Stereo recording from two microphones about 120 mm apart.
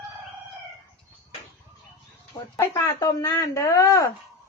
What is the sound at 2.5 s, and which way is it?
Speech, 25° left (ahead or behind).